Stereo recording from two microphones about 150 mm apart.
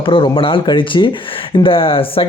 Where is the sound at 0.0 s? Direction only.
35° left (ahead or behind).